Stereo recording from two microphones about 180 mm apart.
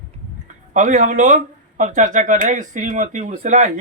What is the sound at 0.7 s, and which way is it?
Speech, 45° right (ahead or behind).